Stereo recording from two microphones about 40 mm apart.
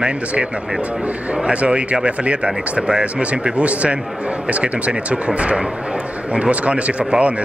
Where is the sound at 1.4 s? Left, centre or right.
Right.